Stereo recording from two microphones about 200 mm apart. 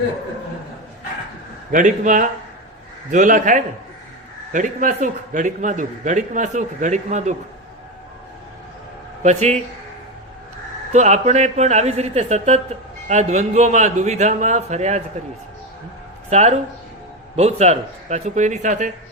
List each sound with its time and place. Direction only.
1.7 s a man's voice: 40° right (ahead or behind)
9.2 s a man's voice: 35° right (ahead or behind)
10.9 s a man's voice: 35° right (ahead or behind)
16.3 s a man's voice: 35° right (ahead or behind)